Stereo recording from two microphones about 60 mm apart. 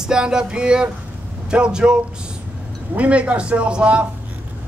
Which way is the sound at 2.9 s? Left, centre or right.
Right.